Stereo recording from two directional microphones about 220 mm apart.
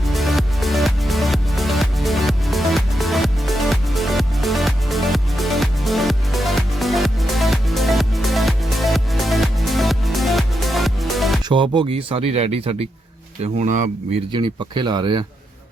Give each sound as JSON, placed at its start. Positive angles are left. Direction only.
{"t": 0.0, "sound": "music", "side_deg": 0}
{"t": 11.4, "sound": "speech", "side_deg": -20}
{"t": 14.3, "sound": "speech", "side_deg": -20}